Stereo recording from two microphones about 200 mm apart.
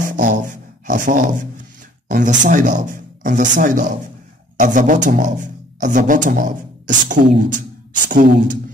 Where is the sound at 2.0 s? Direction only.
40° right (ahead or behind).